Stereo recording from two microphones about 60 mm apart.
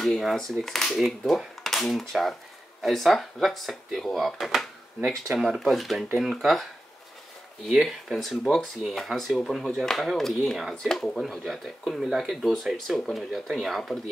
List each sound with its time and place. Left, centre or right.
0.0 s speech: centre
7.7 s speech: centre
12.4 s speech: centre